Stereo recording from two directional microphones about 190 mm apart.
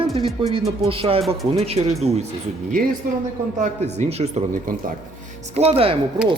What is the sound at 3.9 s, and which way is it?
Speech, 35° right (ahead or behind).